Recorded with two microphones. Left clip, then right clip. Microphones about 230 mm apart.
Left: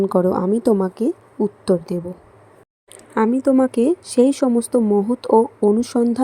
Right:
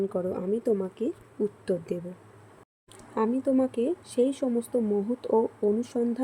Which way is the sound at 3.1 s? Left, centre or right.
Left.